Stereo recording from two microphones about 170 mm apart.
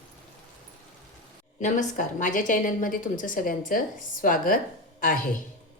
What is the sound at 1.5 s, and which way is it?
A woman's voice, 50° left (ahead or behind).